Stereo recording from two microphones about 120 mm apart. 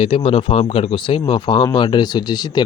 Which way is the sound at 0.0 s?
50° left (ahead or behind).